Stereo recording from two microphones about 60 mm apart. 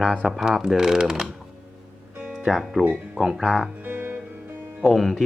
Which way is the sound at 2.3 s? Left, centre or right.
Centre.